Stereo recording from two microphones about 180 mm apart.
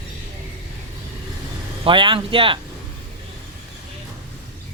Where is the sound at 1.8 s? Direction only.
25° right (ahead or behind).